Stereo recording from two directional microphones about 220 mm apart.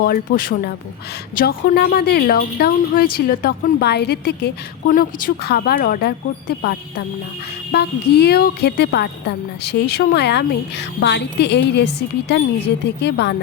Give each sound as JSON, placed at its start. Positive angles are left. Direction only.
{"t": 0.0, "sound": "speech", "side_deg": 45}